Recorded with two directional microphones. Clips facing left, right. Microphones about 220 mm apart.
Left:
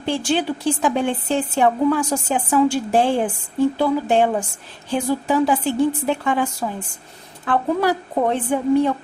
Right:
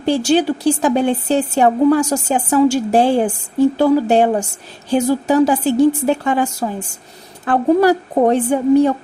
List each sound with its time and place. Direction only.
0.0 s speech: 40° right (ahead or behind)